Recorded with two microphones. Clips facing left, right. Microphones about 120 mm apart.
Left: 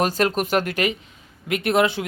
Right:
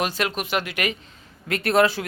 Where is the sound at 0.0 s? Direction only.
40° left (ahead or behind).